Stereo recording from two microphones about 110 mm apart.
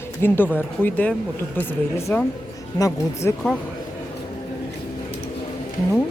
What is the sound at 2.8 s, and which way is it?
Speech, 30° left (ahead or behind).